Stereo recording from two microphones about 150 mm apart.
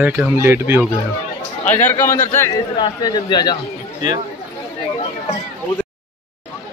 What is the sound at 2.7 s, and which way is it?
Speech, 30° left (ahead or behind).